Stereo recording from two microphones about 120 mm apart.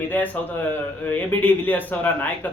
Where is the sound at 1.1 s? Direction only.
15° left (ahead or behind).